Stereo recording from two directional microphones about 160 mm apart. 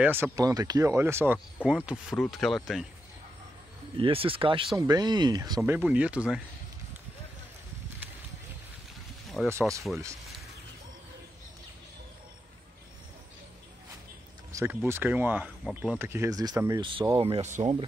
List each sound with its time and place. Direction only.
0.0 s speech: 15° right (ahead or behind)
3.9 s speech: 35° right (ahead or behind)
4.7 s speech: 25° right (ahead or behind)
5.6 s speech: 10° right (ahead or behind)
9.5 s speech: 20° right (ahead or behind)
14.5 s a sound: 20° right (ahead or behind)
14.9 s speech: 15° right (ahead or behind)
17.2 s speech: 40° right (ahead or behind)